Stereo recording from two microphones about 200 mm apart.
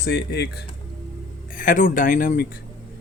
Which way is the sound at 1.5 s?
40° left (ahead or behind).